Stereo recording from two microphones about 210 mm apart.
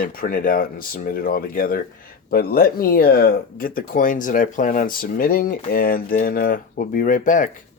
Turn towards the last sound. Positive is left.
turn(degrees=40)  # may be behind; listen again after turning